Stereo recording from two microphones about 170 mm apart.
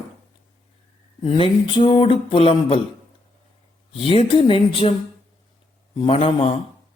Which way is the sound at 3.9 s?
30° left (ahead or behind).